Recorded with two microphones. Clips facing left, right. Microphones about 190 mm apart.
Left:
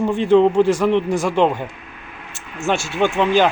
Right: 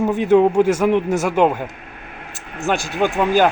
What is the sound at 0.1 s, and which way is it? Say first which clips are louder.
A man's voice: left 1 dB; 10° right (ahead or behind).